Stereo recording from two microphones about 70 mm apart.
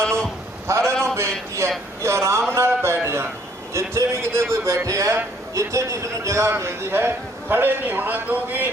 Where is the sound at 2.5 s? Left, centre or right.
Right.